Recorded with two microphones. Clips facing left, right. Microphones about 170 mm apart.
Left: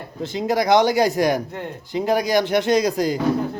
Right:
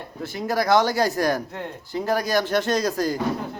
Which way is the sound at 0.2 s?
20° left (ahead or behind).